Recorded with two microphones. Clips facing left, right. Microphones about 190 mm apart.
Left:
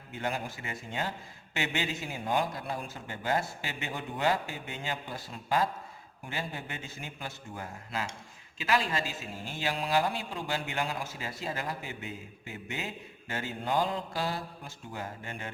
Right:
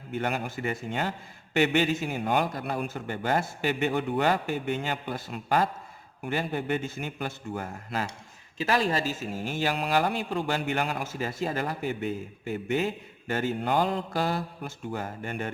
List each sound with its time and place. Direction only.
0.1 s a man's voice: 60° right (ahead or behind)
8.5 s a man's voice: 40° right (ahead or behind)
9.6 s a man's voice: 60° right (ahead or behind)